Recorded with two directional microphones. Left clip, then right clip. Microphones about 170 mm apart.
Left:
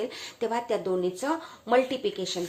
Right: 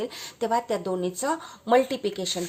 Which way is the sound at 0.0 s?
35° right (ahead or behind).